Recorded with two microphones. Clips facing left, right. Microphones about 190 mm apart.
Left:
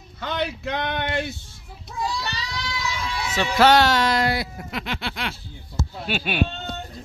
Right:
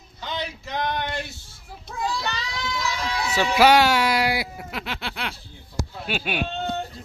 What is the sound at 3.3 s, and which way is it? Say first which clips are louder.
Speech: even; 10° right (ahead or behind).